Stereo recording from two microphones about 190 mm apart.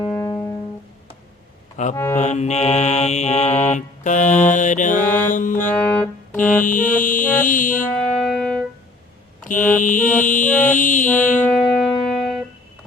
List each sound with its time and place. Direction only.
0.0 s music: 15° left (ahead or behind)
1.7 s music: 40° left (ahead or behind)
2.1 s mantra: 35° left (ahead or behind)
5.0 s mantra: 10° left (ahead or behind)
5.3 s mantra: 45° left (ahead or behind)
5.6 s music: 5° left (ahead or behind)
6.6 s mantra: 45° left (ahead or behind)
7.9 s music: centre (ahead or behind)
9.4 s mantra: 45° left (ahead or behind)
11.3 s music: 5° left (ahead or behind)